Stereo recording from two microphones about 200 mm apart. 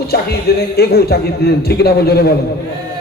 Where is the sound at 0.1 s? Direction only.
55° left (ahead or behind).